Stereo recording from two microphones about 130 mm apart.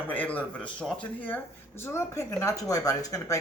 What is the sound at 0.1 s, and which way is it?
Speech, 10° left (ahead or behind).